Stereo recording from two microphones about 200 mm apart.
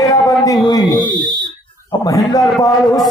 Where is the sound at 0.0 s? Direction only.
15° left (ahead or behind).